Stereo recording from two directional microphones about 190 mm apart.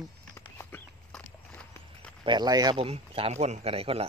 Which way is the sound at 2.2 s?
20° right (ahead or behind).